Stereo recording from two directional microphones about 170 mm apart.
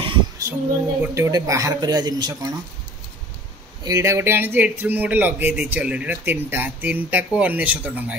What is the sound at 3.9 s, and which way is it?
Speech, 15° right (ahead or behind).